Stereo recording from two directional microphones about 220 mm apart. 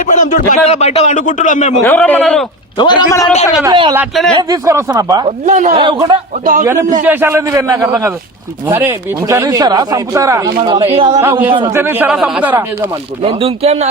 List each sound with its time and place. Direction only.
0.1 s a man's voice: 35° left (ahead or behind)
1.8 s a man's voice: 5° left (ahead or behind)
2.7 s a man's voice: 20° left (ahead or behind)
3.6 s speech: 20° right (ahead or behind)
3.9 s a man's voice: centre (ahead or behind)
4.4 s speech: 15° right (ahead or behind)
5.5 s speech: 35° right (ahead or behind)
5.8 s speech: 20° right (ahead or behind)
6.4 s speech: 40° right (ahead or behind)
7.0 s speech: 10° right (ahead or behind)
9.3 s speech: 15° right (ahead or behind)
11.2 s speech: 10° right (ahead or behind)
13.2 s speech: 25° right (ahead or behind)